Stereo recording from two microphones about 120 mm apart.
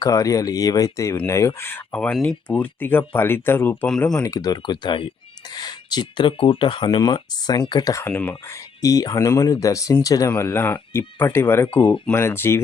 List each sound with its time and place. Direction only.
0.0 s speech: 30° left (ahead or behind)
4.1 s speech: 30° left (ahead or behind)
8.0 s speech: 15° left (ahead or behind)
8.8 s speech: 30° left (ahead or behind)